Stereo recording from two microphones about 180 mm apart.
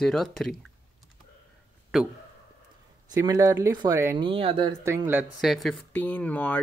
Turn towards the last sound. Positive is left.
turn(degrees=10)  # may be behind; listen again after turning